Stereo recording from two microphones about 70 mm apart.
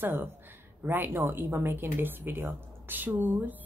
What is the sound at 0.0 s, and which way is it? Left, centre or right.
A woman's voice, right.